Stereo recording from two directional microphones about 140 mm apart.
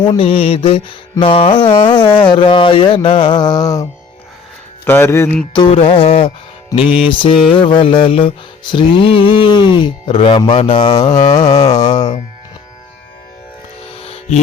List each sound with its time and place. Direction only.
0.0 s mantra: 40° left (ahead or behind)
1.2 s speech: 40° left (ahead or behind); by 3.8 s 25° left (ahead or behind)
4.9 s music: 20° left (ahead or behind)
5.5 s speech: 40° left (ahead or behind)
6.8 s mantra: 10° right (ahead or behind)
7.1 s speech: 35° left (ahead or behind)
11.3 s music: 30° left (ahead or behind)
14.0 s a sound: 45° left (ahead or behind)